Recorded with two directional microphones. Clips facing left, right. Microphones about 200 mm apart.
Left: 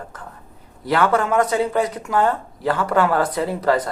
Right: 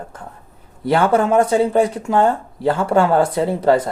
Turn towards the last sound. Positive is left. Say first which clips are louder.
# right 4 dB
turn(degrees=-25)  # may be behind; listen again after turning